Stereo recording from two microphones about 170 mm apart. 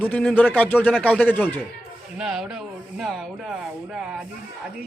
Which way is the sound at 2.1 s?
5° right (ahead or behind).